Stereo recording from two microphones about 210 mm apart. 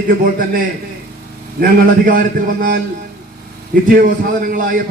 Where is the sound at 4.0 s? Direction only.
40° right (ahead or behind).